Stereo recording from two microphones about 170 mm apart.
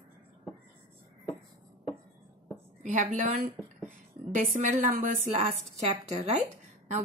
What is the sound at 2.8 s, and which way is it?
A woman's voice, 50° right (ahead or behind).